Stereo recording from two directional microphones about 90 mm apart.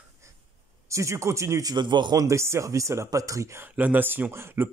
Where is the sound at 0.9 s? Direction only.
35° right (ahead or behind).